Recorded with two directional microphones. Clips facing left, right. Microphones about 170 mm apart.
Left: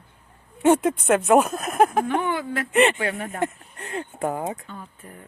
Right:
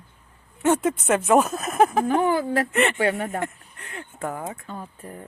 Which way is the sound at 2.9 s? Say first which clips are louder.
Right 4 dB; 35° right (ahead or behind).